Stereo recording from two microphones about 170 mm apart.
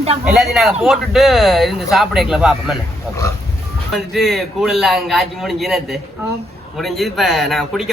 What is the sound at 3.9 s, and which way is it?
A man's voice, centre (ahead or behind).